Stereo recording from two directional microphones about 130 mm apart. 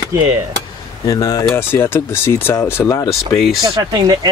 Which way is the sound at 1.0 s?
30° left (ahead or behind).